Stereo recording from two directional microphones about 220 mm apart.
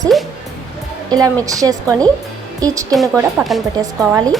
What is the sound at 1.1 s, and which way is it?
A woman's voice, 15° right (ahead or behind).